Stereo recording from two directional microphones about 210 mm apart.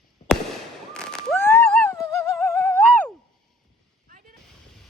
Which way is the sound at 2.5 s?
10° left (ahead or behind).